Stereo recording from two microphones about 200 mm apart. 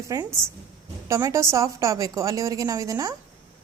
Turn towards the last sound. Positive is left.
turn(degrees=-15)  # may be behind; listen again after turning